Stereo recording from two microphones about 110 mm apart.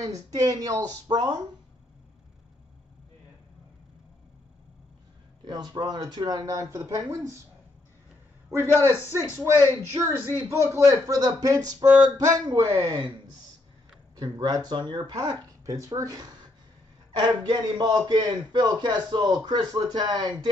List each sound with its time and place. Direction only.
0.0 s a man's voice: 35° right (ahead or behind)
5.5 s a man's voice: 40° right (ahead or behind)
8.5 s a man's voice: 25° left (ahead or behind)
9.9 s a man's voice: 20° right (ahead or behind); by 12.6 s 40° right (ahead or behind)
12.7 s speech: 25° right (ahead or behind)
14.1 s a man's voice: 35° right (ahead or behind)
15.1 s a man's voice: 30° right (ahead or behind)
17.5 s a man's voice: 40° right (ahead or behind)